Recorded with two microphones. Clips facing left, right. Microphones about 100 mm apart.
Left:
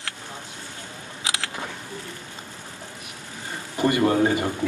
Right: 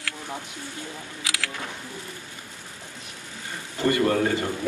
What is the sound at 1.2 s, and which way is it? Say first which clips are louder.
Camera: left 2 dB; 20° left (ahead or behind).